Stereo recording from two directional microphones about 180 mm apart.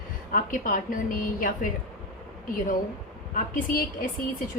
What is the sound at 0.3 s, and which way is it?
A woman's voice, 50° left (ahead or behind).